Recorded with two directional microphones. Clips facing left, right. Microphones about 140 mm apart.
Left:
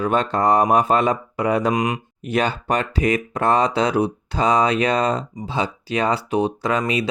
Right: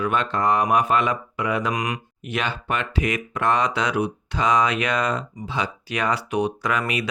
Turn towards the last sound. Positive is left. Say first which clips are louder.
# left 3 dB
turn(degrees=30)  # may be behind; listen again after turning